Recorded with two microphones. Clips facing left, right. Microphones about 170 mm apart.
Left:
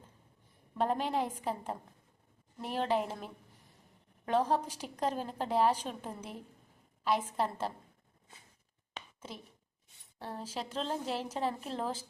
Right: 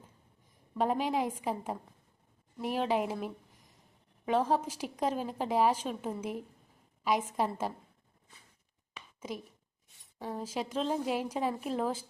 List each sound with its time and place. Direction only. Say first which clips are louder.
0.8 s a woman's voice: right 2 dB; 10° right (ahead or behind)
10.2 s speech: right 4 dB; 10° right (ahead or behind)